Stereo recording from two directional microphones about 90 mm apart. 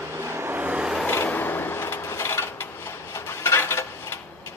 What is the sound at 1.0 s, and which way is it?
Vehicle, 25° left (ahead or behind).